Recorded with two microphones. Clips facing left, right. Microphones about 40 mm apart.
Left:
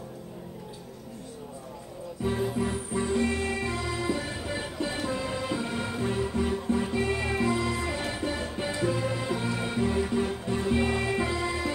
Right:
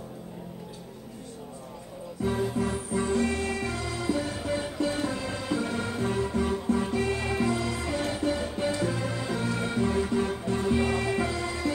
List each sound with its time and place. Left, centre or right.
2.2 s music: centre